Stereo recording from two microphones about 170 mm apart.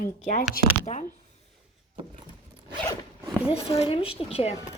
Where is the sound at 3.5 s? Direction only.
35° left (ahead or behind).